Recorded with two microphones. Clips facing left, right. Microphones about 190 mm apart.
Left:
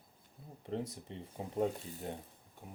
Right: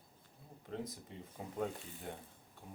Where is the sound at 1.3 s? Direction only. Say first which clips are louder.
Left 5 dB; 25° left (ahead or behind).